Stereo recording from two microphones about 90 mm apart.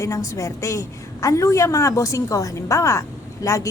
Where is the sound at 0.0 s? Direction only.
35° left (ahead or behind).